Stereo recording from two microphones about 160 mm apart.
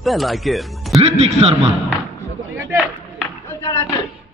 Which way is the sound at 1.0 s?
40° right (ahead or behind).